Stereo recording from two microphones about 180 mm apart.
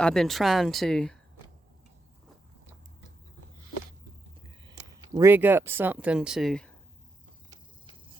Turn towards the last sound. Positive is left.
turn(degrees=5)  # may be behind; listen again after turning